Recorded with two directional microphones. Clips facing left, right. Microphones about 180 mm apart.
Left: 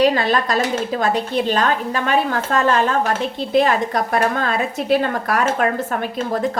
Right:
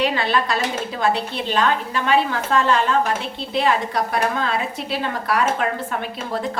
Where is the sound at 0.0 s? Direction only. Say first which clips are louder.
Left 4 dB; 40° left (ahead or behind).